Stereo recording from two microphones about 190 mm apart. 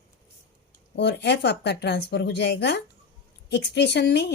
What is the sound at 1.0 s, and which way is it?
A woman's voice, 65° left (ahead or behind).